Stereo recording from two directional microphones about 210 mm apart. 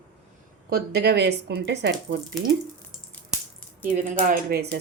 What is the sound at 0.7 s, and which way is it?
Speech, 50° right (ahead or behind).